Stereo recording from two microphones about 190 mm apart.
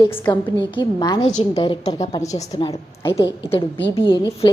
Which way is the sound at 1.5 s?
25° left (ahead or behind).